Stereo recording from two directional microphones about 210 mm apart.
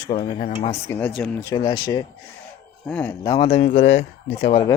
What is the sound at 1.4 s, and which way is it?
Speech, 15° left (ahead or behind).